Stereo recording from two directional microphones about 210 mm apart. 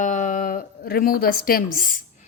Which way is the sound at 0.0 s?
35° left (ahead or behind).